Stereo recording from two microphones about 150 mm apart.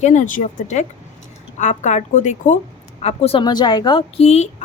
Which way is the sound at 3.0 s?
45° left (ahead or behind).